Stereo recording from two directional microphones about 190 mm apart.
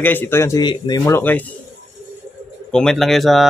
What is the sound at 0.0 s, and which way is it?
Speech, 10° left (ahead or behind).